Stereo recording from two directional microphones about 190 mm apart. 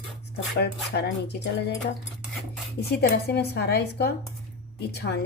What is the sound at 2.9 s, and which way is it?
A woman's voice, 60° left (ahead or behind).